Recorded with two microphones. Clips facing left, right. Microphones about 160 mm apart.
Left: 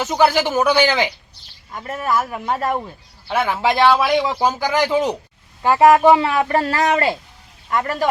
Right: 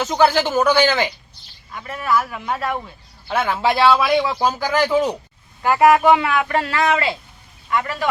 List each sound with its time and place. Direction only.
0.0 s a man's voice: 10° left (ahead or behind)
1.7 s a man's voice: 45° left (ahead or behind)
3.2 s a man's voice: 10° left (ahead or behind)
5.6 s a man's voice: 30° left (ahead or behind)